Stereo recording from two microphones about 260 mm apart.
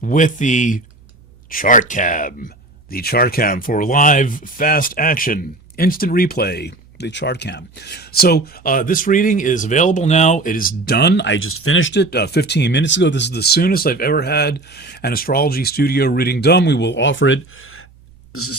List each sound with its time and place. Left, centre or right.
0.0 s speech: left
18.3 s burping: left